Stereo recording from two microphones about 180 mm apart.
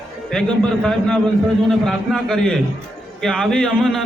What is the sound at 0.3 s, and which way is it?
A man's voice, 5° left (ahead or behind).